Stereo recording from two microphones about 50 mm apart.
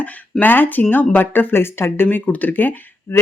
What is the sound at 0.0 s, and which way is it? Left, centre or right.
Speech, left.